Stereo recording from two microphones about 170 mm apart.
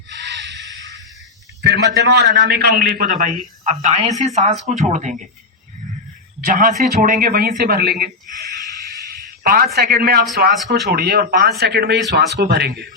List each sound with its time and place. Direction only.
0.1 s a sound: 85° right
1.6 s a man's voice: 85° right; by 5.3 s 45° right (ahead or behind)
6.4 s a man's voice: 55° right (ahead or behind); by 12.7 s 70° right (ahead or behind)